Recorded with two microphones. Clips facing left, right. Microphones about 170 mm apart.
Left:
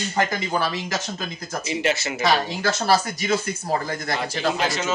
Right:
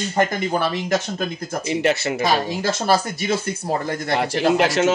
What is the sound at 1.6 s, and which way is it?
Speech, 55° right (ahead or behind).